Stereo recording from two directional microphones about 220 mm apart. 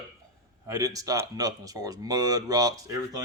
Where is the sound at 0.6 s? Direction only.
15° right (ahead or behind).